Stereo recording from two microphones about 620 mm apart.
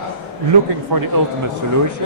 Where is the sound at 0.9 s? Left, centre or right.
Right.